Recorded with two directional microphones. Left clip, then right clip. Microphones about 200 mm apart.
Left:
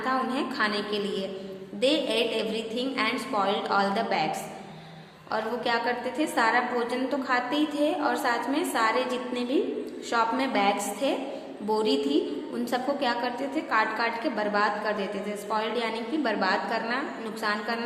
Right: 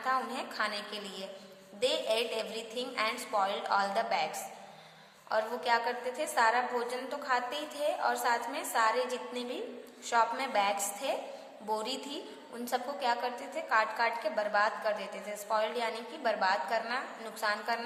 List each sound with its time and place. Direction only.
0.0 s a woman's voice: 25° right (ahead or behind)